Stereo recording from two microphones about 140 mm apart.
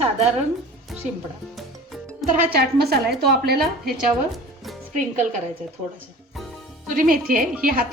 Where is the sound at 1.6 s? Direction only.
Centre (ahead or behind).